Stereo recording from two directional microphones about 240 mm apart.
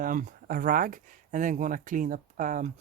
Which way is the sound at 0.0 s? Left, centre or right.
Right.